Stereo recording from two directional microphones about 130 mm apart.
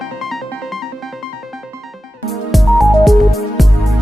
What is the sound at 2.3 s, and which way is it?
Music, centre (ahead or behind).